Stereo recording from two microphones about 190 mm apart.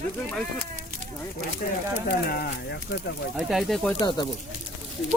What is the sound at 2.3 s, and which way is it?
Speech, 50° left (ahead or behind).